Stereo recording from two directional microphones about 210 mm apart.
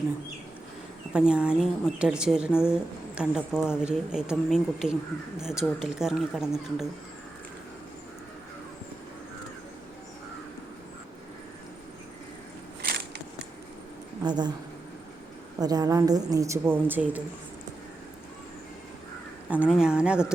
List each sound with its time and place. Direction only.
1.1 s speech: 5° right (ahead or behind)
12.8 s a sound: 50° right (ahead or behind)
14.3 s speech: 20° right (ahead or behind)
15.5 s a woman's voice: 20° right (ahead or behind)
19.5 s speech: 5° right (ahead or behind)